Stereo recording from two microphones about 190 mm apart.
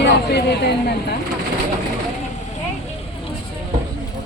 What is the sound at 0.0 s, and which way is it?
Speech, 60° left (ahead or behind).